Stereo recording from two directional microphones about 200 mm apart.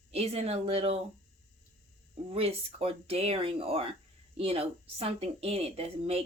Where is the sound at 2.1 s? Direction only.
30° right (ahead or behind).